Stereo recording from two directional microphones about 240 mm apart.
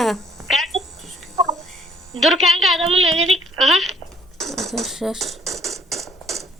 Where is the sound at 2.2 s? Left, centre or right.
Centre.